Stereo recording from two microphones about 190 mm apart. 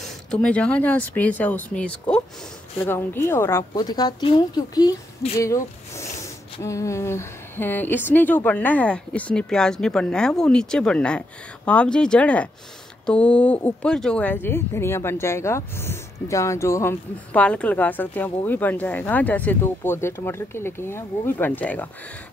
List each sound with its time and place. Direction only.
0.0 s speech: 5° left (ahead or behind)